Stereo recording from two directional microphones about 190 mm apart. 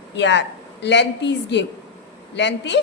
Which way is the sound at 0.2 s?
70° left (ahead or behind).